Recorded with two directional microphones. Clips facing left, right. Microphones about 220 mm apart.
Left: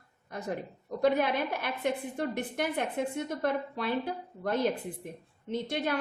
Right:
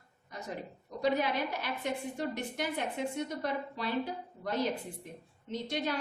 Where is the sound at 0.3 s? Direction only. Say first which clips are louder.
Left 5 dB; 55° left (ahead or behind).